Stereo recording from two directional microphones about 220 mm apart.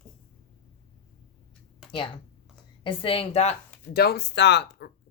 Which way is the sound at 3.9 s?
45° left (ahead or behind).